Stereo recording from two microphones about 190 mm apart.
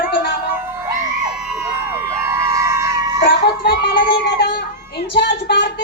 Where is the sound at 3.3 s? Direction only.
55° left (ahead or behind).